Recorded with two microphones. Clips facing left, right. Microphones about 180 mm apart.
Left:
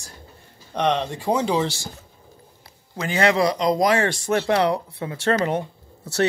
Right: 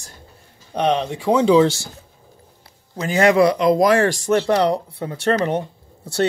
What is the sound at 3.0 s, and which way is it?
Speech, 45° right (ahead or behind).